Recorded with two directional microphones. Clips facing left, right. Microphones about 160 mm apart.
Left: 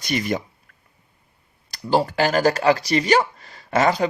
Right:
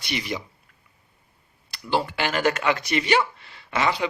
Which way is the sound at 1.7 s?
40° left (ahead or behind).